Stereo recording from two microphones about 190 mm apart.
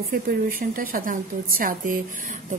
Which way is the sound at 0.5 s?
50° right (ahead or behind).